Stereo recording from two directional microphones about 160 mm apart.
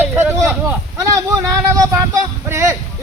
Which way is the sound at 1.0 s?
20° right (ahead or behind).